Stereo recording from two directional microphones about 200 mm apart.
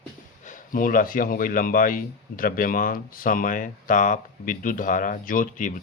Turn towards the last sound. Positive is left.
turn(degrees=40)  # may be behind; listen again after turning